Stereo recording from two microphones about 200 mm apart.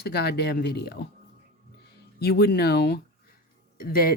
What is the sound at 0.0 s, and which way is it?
Speech, 55° left (ahead or behind).